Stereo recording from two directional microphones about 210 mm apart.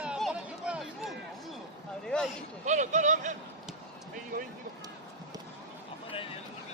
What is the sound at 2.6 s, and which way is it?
Vehicle, 35° right (ahead or behind).